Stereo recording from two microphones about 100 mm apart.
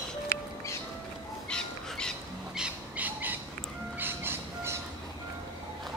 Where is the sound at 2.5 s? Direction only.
10° right (ahead or behind).